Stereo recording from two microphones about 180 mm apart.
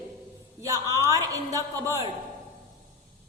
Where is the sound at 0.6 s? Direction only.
15° right (ahead or behind).